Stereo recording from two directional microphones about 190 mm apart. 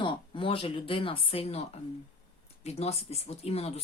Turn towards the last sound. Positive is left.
turn(degrees=35)  # may be behind; listen again after turning